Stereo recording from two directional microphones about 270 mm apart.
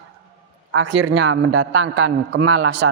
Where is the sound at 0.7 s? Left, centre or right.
Right.